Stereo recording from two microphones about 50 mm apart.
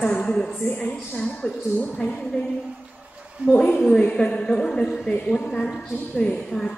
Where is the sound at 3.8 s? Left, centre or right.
Centre.